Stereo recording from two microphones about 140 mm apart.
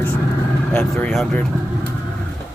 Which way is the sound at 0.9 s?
5° left (ahead or behind).